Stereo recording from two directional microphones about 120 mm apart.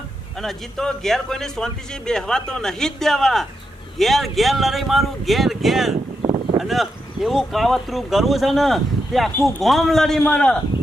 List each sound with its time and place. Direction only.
0.3 s speech: 5° left (ahead or behind)
6.2 s a sound: 50° right (ahead or behind)
6.6 s a man's voice: centre (ahead or behind)